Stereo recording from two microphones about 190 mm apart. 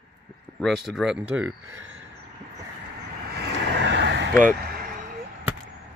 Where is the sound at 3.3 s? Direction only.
60° right (ahead or behind).